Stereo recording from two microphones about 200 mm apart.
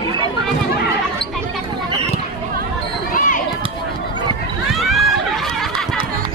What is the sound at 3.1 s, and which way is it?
Basketball bounce, 40° left (ahead or behind).